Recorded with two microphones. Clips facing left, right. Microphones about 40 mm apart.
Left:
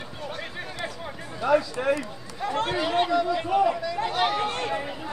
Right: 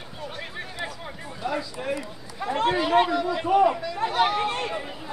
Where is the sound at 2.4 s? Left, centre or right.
Right.